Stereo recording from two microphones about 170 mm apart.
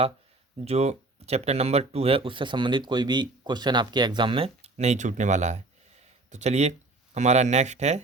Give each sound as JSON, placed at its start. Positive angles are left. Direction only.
{"t": 0.6, "sound": "speech", "side_deg": -40}